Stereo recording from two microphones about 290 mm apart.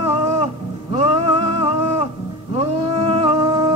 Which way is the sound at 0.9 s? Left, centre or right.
Centre.